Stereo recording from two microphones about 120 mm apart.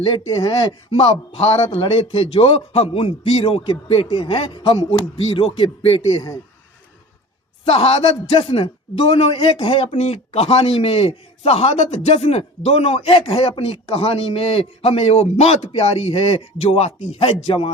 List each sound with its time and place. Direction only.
0.6 s a man's voice: 50° left (ahead or behind)
6.1 s a man's voice: 30° left (ahead or behind)
7.6 s a man's voice: 55° left (ahead or behind)